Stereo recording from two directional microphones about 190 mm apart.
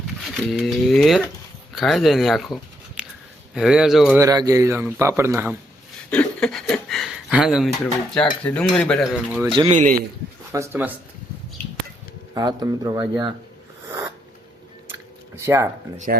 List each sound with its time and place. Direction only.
0.3 s cutlery: centre (ahead or behind)
1.7 s speech: centre (ahead or behind)
3.5 s cutlery: 5° right (ahead or behind)
4.2 s speech: 20° right (ahead or behind)
6.1 s a sound: 5° left (ahead or behind)
8.1 s cutlery: 5° left (ahead or behind)
9.6 s a man's voice: 40° right (ahead or behind)
10.5 s speech: 15° right (ahead or behind)
12.3 s speech: 20° right (ahead or behind)
15.4 s speech: 15° right (ahead or behind)